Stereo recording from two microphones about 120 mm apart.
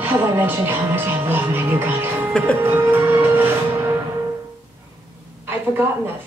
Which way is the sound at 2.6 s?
20° right (ahead or behind).